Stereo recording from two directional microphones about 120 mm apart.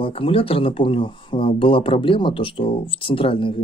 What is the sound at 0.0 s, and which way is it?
Speech, 50° left (ahead or behind).